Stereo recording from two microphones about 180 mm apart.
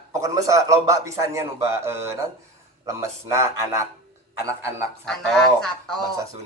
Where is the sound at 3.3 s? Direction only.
15° right (ahead or behind).